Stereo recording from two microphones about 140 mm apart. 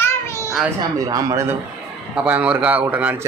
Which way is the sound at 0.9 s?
25° right (ahead or behind).